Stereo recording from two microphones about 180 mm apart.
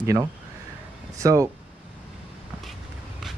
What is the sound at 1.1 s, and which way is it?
Speech, 20° right (ahead or behind).